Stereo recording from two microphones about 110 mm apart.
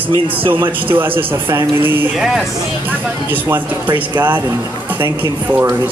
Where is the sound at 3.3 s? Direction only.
15° right (ahead or behind).